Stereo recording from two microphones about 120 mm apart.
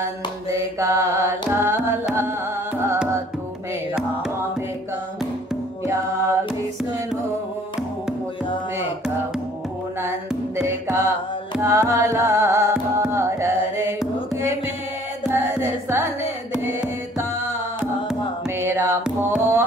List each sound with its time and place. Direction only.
0.0 s music: 25° right (ahead or behind)
1.5 s carnatic music: 20° right (ahead or behind)
5.9 s music: 20° right (ahead or behind)
10.0 s music: 25° right (ahead or behind)
13.1 s carnatic music: 25° right (ahead or behind)
14.3 s music: 25° right (ahead or behind)
15.3 s carnatic music: 20° right (ahead or behind)
18.6 s music: 20° right (ahead or behind)
19.0 s music: 10° right (ahead or behind)